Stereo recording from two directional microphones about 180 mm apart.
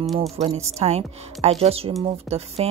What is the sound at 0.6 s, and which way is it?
Speech, 35° right (ahead or behind).